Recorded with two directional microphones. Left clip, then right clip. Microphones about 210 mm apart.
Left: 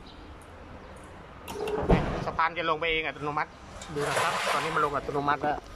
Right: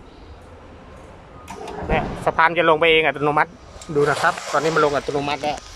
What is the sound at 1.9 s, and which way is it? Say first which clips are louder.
Speech: right 9 dB; 50° right (ahead or behind).